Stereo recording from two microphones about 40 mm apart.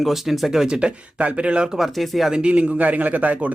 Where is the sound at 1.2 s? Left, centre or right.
Right.